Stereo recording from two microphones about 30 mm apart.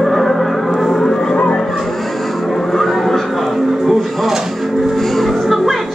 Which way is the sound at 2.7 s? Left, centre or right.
Centre.